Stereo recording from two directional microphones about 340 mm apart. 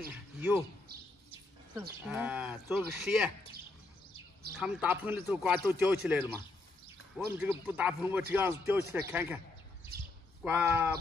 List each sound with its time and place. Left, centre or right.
0.4 s speech: centre
1.8 s speech: centre
4.6 s a man's voice: centre
7.3 s a man's voice: centre
9.9 s chirp: right
10.4 s a man's voice: centre